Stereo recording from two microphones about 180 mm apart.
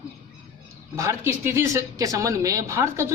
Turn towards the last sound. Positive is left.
turn(degrees=-15)  # may be behind; listen again after turning